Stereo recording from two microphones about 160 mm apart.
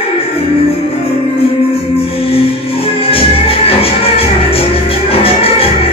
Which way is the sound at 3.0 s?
35° left (ahead or behind).